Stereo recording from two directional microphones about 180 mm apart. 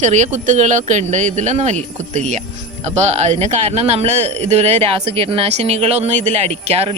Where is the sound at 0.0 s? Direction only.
40° right (ahead or behind).